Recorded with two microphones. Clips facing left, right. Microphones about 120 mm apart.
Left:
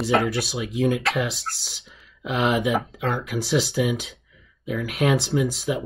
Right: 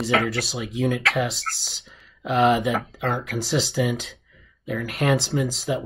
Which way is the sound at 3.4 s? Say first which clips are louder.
Left 4 dB; 55° left (ahead or behind).